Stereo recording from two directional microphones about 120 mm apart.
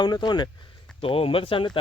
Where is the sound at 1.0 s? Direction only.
50° left (ahead or behind).